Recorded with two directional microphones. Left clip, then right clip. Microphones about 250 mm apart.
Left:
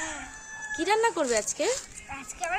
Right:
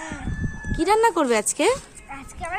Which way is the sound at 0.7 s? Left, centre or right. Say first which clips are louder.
Right 6 dB; centre.